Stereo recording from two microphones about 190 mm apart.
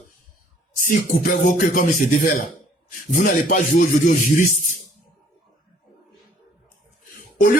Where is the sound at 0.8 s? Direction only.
50° left (ahead or behind).